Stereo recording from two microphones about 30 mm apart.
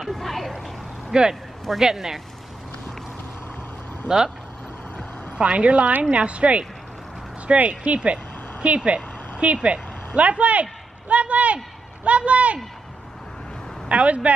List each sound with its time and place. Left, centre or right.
0.1 s a sound: centre
1.1 s speech: right
5.4 s speech: right
13.8 s speech: right